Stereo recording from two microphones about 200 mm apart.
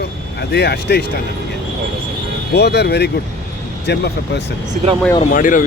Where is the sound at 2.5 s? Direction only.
55° left (ahead or behind).